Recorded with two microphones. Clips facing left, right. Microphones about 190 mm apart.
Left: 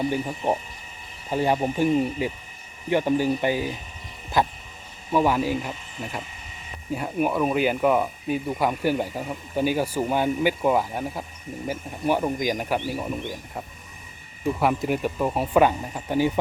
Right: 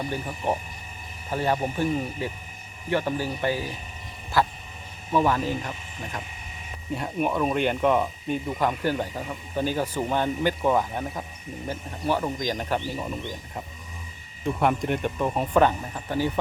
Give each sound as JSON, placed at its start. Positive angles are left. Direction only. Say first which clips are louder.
{"t": 0.1, "sound": "speech", "louder": "left 3 dB", "side_deg": 15}
{"t": 4.3, "sound": "a sound", "louder": "left 1 dB", "side_deg": 20}
{"t": 5.1, "sound": "speech", "louder": "left 2 dB", "side_deg": 10}
{"t": 14.4, "sound": "speech", "louder": "left 1 dB", "side_deg": 5}